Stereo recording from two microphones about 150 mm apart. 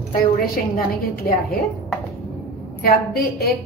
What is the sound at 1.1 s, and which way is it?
Speech, 90° left.